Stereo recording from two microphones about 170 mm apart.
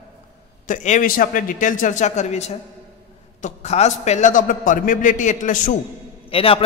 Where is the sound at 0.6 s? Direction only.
45° left (ahead or behind).